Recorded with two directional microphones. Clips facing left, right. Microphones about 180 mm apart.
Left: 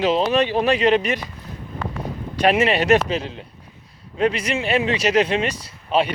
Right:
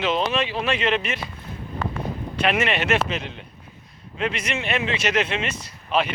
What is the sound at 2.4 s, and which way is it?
A man's voice, 35° left (ahead or behind).